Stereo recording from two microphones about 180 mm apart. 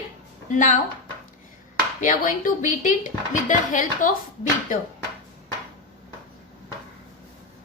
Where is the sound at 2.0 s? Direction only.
45° left (ahead or behind).